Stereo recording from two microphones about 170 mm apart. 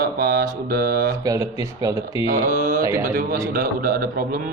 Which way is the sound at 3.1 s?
60° right (ahead or behind).